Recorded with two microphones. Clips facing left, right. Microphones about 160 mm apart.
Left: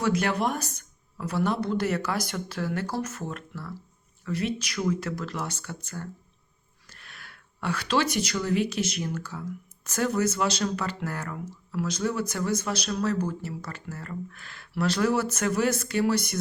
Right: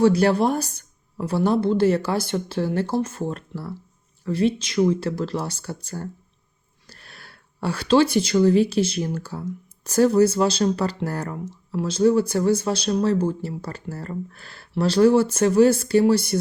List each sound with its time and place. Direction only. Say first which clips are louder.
0.0 s a woman's voice: right 8 dB; 35° right (ahead or behind)